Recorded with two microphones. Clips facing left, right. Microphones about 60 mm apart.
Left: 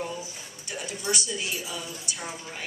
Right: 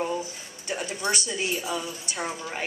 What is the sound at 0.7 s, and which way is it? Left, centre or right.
Speech, right.